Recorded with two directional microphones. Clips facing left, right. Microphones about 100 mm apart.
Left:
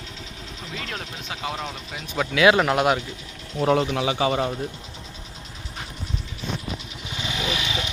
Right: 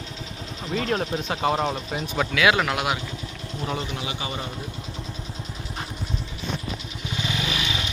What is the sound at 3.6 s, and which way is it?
Speech, 60° left (ahead or behind).